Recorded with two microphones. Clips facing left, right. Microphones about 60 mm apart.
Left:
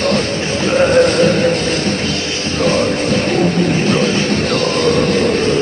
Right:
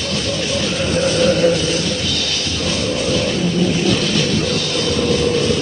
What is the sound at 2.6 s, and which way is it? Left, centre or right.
Music, left.